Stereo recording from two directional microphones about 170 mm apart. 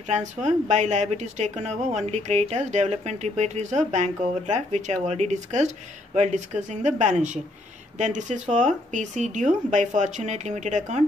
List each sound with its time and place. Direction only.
0.0 s a woman's voice: 45° right (ahead or behind)